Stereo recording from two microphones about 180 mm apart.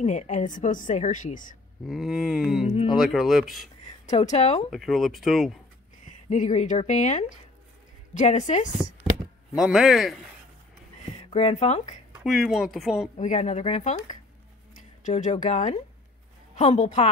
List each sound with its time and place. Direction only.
0.0 s a woman's voice: 40° left (ahead or behind)
1.9 s speech: centre (ahead or behind)
2.7 s speech: 35° left (ahead or behind)
3.0 s speech: centre (ahead or behind)
4.0 s speech: 40° left (ahead or behind)
4.6 s speech: centre (ahead or behind)
6.2 s speech: 40° left (ahead or behind)
9.6 s speech: centre (ahead or behind)
11.2 s speech: 35° left (ahead or behind)
12.3 s speech: centre (ahead or behind)
13.2 s a woman's voice: 40° left (ahead or behind)